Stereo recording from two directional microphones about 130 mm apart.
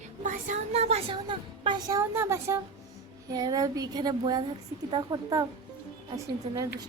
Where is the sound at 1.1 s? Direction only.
40° right (ahead or behind).